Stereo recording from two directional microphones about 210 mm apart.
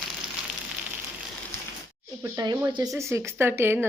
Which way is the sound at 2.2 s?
15° right (ahead or behind).